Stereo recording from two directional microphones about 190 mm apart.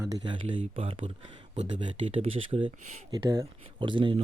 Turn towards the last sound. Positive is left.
turn(degrees=-25)  # may be behind; listen again after turning